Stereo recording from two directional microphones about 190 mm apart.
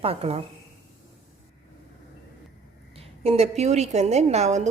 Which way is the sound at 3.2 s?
30° right (ahead or behind).